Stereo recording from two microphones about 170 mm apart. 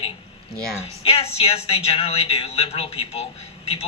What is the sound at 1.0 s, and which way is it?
Speech, 35° left (ahead or behind).